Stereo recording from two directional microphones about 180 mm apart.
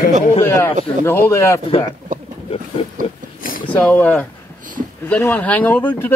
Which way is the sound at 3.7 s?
10° left (ahead or behind).